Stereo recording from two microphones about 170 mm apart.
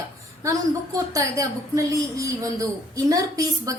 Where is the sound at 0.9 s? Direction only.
20° right (ahead or behind).